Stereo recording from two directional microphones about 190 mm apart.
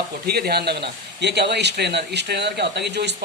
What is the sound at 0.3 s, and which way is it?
Speech, 55° right (ahead or behind).